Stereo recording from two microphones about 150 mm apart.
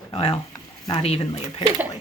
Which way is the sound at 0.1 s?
35° left (ahead or behind).